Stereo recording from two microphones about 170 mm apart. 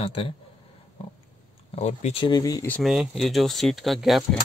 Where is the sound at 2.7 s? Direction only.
Centre (ahead or behind).